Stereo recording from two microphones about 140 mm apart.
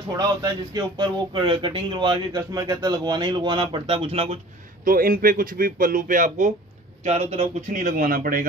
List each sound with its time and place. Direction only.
0.1 s speech: 25° right (ahead or behind); by 4.4 s 45° right (ahead or behind)
4.8 s a man's voice: 85° right; by 6.5 s 65° right (ahead or behind)
7.1 s speech: 50° right (ahead or behind); by 8.5 s 85° right